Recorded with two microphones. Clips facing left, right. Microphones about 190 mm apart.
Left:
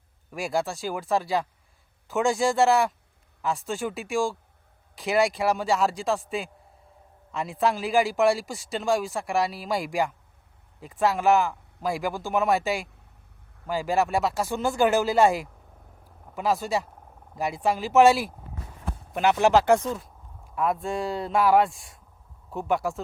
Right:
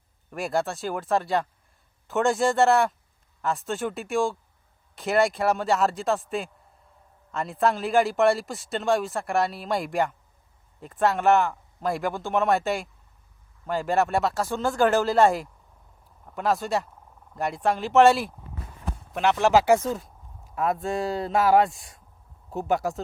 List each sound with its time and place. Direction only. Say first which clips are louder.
0.3 s a man's voice: right 1 dB; centre (ahead or behind)